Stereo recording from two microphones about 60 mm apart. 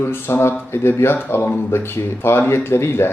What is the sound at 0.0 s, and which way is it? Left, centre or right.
Speech, left.